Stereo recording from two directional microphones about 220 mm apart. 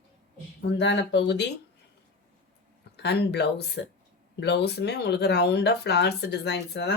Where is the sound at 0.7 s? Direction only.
50° left (ahead or behind).